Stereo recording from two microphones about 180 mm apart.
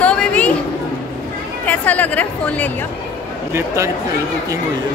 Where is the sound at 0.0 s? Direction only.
5° left (ahead or behind).